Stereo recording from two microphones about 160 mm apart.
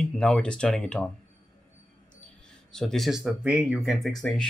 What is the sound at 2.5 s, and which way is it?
Speech, 5° left (ahead or behind).